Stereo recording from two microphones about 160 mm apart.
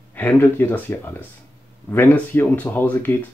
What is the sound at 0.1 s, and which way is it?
Speech, 10° left (ahead or behind).